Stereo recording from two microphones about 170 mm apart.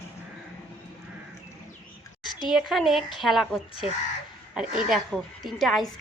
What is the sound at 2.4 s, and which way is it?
A woman's voice, centre (ahead or behind).